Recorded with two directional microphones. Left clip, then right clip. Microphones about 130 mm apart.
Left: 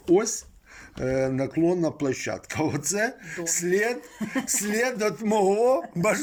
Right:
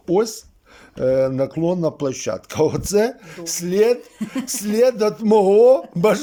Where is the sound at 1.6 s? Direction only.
35° right (ahead or behind).